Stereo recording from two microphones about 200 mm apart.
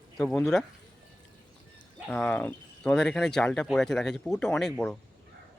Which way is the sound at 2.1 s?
5° left (ahead or behind).